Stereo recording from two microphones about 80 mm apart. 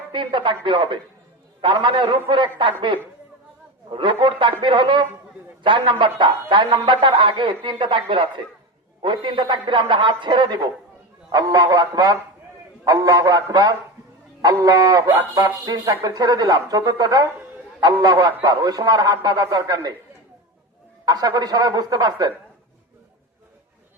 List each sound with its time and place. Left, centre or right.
0.1 s a man's voice: right
3.8 s a man's voice: right
11.3 s speech: right
21.0 s a man's voice: right